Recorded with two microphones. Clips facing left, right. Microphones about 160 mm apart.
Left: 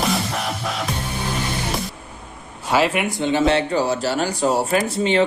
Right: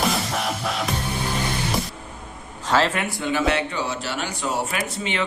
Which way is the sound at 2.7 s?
15° left (ahead or behind).